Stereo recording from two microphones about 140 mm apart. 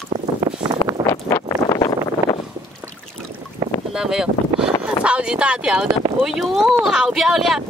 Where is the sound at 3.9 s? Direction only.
5° right (ahead or behind).